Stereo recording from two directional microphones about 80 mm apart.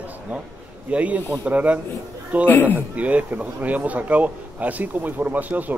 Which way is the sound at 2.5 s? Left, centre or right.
Left.